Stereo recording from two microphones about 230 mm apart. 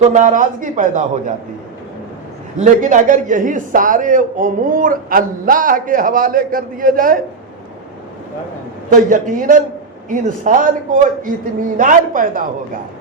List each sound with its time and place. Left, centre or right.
0.1 s a man's voice: right
2.6 s a man's voice: right
8.9 s a man's voice: right